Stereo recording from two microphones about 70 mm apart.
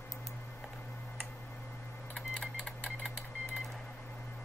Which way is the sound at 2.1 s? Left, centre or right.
Centre.